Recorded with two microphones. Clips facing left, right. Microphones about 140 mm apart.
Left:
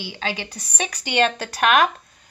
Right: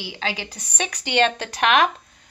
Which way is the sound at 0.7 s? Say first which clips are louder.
Even; 10° left (ahead or behind).